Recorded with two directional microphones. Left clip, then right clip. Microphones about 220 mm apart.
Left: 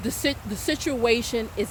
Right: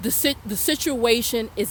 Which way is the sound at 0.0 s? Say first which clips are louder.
Right 3 dB; 55° right (ahead or behind).